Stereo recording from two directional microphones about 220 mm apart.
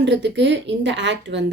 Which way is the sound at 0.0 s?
50° right (ahead or behind).